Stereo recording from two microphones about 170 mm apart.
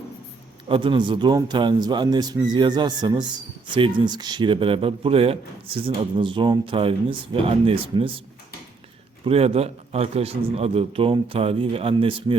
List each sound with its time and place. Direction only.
0.7 s a man's voice: 30° right (ahead or behind)
9.2 s speech: 35° right (ahead or behind)